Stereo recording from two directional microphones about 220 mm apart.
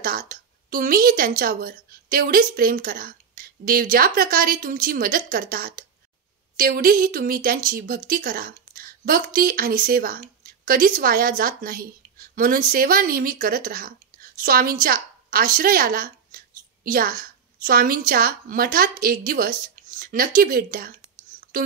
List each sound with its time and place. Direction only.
0.0 s a woman's voice: 40° right (ahead or behind)
21.4 s whispering: 40° right (ahead or behind)